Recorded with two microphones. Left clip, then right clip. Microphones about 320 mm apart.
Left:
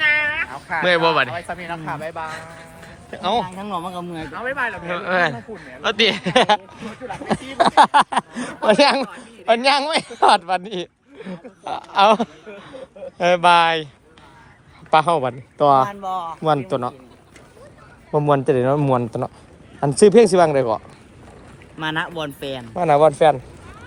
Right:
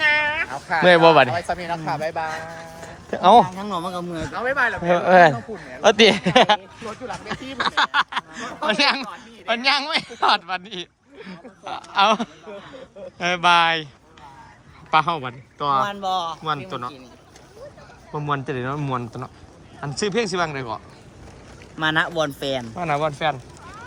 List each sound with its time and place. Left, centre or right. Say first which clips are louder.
0.0 s a sound: left 1 dB; right
0.8 s speech: right 4 dB; right
7.8 s speech: left 7 dB; centre
12.7 s a sound: left 4 dB; centre
14.8 s speech: left 4 dB; centre
16.0 s speech: right 2 dB; right
16.5 s speech: left 7 dB; centre
18.3 s speech: left 8 dB; centre
21.8 s speech: right 4 dB; centre
22.7 s speech: left 13 dB; centre